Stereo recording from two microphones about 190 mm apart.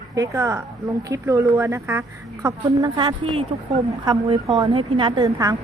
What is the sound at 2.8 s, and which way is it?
Speech, 25° right (ahead or behind).